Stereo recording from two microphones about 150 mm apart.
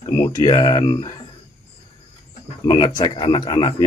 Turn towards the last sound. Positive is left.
turn(degrees=30)  # may be behind; listen again after turning